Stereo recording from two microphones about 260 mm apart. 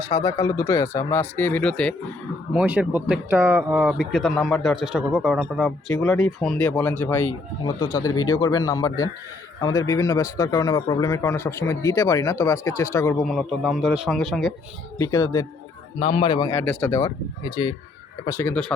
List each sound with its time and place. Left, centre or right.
0.1 s a man's voice: centre
13.3 s a man's voice: centre
14.9 s speech: centre